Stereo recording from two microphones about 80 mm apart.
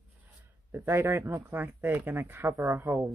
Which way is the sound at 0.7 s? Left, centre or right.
Right.